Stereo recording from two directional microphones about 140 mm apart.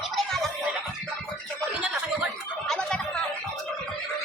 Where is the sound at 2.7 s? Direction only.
5° left (ahead or behind).